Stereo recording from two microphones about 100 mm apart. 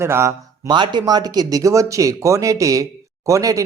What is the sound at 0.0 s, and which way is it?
Speech, 25° right (ahead or behind).